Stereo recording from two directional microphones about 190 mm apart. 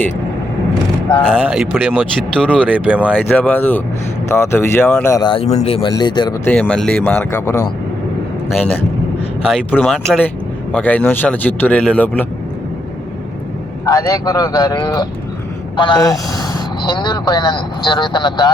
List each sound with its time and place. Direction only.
1.3 s speech: 5° right (ahead or behind)
3.2 s speech: 5° left (ahead or behind); by 6.3 s 25° left (ahead or behind)
6.4 s speech: 5° left (ahead or behind)
9.7 s speech: centre (ahead or behind)
13.8 s speech: 20° left (ahead or behind)